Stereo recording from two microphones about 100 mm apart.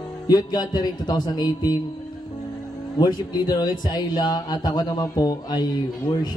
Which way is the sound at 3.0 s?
45° left (ahead or behind).